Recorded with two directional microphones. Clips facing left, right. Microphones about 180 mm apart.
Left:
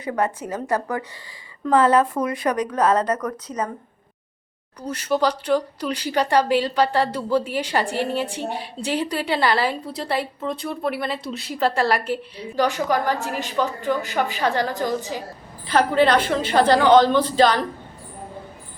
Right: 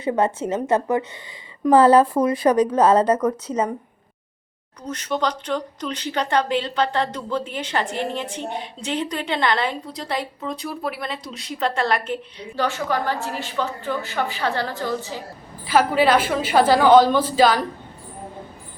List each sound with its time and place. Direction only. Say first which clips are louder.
0.0 s speech: right 3 dB; 25° right (ahead or behind)
4.8 s a woman's voice: left 3 dB; 10° left (ahead or behind)
15.6 s a woman's voice: even; 5° right (ahead or behind)